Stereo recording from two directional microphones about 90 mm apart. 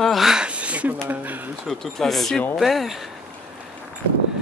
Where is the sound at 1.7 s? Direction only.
5° left (ahead or behind).